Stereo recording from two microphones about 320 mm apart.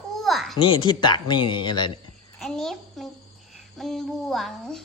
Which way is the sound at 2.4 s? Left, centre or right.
Centre.